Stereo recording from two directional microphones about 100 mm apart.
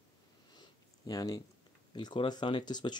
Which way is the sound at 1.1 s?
40° left (ahead or behind).